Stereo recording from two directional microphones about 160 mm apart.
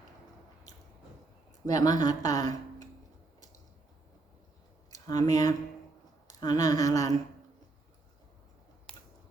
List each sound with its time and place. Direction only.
1.6 s speech: 25° left (ahead or behind)
4.9 s speech: 20° left (ahead or behind)
6.4 s a sound: 25° left (ahead or behind)